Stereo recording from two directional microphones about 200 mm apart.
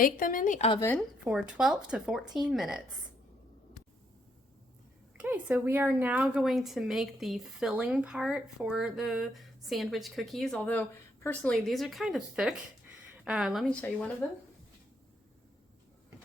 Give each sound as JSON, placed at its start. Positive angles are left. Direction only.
{"t": 0.0, "sound": "a woman's voice", "side_deg": 40}
{"t": 0.8, "sound": "speech", "side_deg": 10}
{"t": 1.2, "sound": "a woman's voice", "side_deg": -5}
{"t": 5.1, "sound": "a woman's voice", "side_deg": -5}